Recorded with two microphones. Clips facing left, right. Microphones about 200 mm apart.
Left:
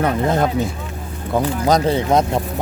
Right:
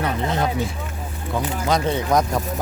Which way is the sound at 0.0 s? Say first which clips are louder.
Left 5 dB; 50° left (ahead or behind).